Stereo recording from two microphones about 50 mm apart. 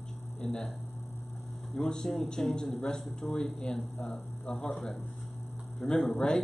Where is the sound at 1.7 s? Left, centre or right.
Centre.